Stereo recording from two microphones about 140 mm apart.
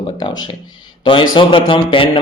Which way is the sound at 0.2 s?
35° left (ahead or behind).